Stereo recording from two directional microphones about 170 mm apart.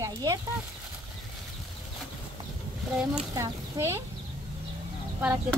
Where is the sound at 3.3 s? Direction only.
20° right (ahead or behind).